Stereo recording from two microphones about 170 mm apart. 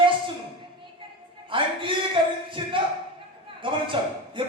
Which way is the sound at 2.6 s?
30° right (ahead or behind).